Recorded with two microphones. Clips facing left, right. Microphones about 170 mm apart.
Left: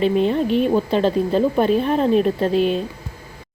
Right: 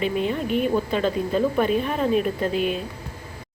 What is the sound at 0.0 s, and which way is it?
A woman's voice, 30° left (ahead or behind).